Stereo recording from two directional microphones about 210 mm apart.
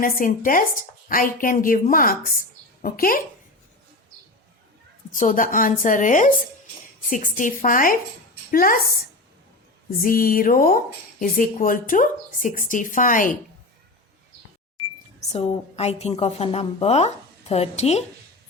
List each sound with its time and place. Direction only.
0.0 s speech: 40° left (ahead or behind)
5.1 s speech: 40° left (ahead or behind)
10.0 s speech: 40° left (ahead or behind)
15.3 s a woman's voice: 30° left (ahead or behind)